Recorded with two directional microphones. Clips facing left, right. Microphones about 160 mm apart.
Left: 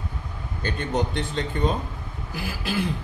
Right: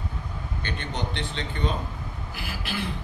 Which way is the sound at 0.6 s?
40° left (ahead or behind).